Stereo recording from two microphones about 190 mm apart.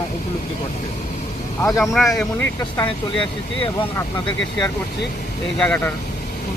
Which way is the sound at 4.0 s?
20° left (ahead or behind).